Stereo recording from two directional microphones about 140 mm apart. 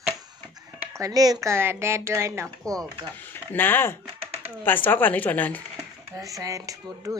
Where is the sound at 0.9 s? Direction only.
25° right (ahead or behind).